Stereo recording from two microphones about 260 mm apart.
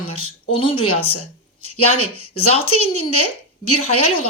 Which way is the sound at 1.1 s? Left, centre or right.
Left.